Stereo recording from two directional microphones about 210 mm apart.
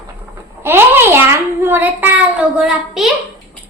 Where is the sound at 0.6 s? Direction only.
10° right (ahead or behind).